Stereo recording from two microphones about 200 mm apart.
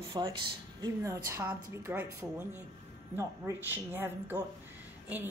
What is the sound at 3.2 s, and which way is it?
A woman's voice, 10° right (ahead or behind).